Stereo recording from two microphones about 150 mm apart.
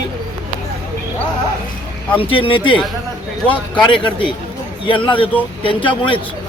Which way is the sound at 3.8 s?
35° left (ahead or behind).